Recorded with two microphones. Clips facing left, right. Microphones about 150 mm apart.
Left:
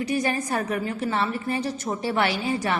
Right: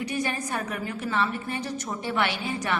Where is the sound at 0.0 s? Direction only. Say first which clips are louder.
Left 4 dB; 35° left (ahead or behind).